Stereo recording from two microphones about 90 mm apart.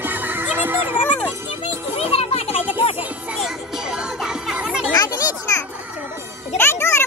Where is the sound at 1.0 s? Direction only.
15° left (ahead or behind).